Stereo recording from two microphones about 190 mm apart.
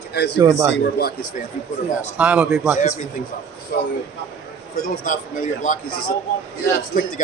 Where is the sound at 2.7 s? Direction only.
40° left (ahead or behind).